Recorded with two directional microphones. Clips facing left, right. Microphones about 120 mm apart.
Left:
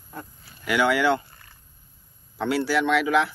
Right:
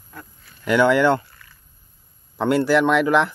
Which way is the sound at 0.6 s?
45° right (ahead or behind).